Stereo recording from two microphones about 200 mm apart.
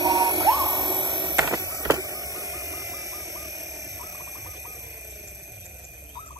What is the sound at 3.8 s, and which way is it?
Frog, 15° right (ahead or behind).